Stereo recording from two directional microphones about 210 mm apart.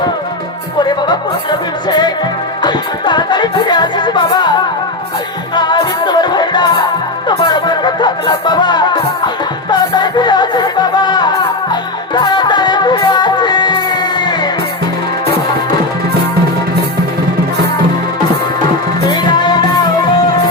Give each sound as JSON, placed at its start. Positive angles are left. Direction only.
{"t": 1.9, "sound": "music", "side_deg": 20}
{"t": 5.5, "sound": "music", "side_deg": 20}
{"t": 19.0, "sound": "music", "side_deg": 20}